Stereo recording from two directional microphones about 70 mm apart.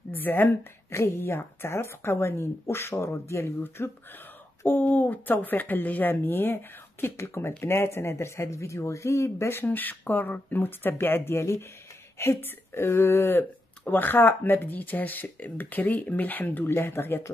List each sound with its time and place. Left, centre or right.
0.1 s a woman's voice: left